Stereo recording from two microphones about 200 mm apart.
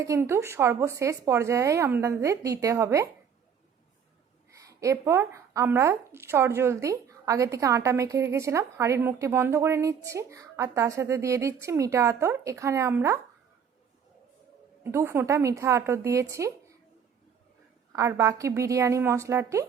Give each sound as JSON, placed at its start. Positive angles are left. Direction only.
{"t": 0.0, "sound": "a woman's voice", "side_deg": -15}
{"t": 4.6, "sound": "a woman's voice", "side_deg": -15}
{"t": 14.9, "sound": "a woman's voice", "side_deg": -15}
{"t": 17.9, "sound": "a woman's voice", "side_deg": -15}